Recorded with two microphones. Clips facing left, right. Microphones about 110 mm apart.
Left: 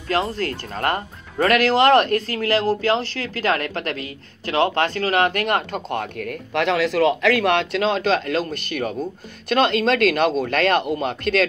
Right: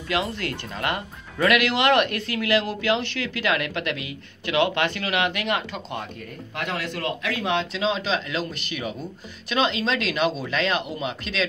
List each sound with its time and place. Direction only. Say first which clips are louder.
0.1 s speech: left 4 dB; 35° left (ahead or behind)